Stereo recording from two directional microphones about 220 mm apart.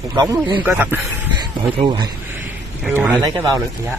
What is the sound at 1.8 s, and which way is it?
Speech, 20° right (ahead or behind).